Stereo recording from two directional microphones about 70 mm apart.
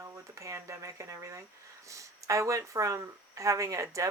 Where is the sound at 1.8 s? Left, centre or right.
Right.